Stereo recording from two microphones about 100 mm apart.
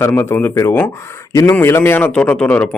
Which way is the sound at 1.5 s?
25° left (ahead or behind).